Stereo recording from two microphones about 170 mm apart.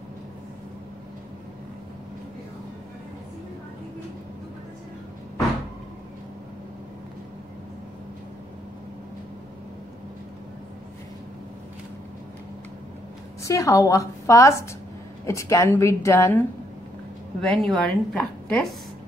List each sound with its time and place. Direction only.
13.4 s a woman's voice: 20° left (ahead or behind)
17.4 s a woman's voice: centre (ahead or behind)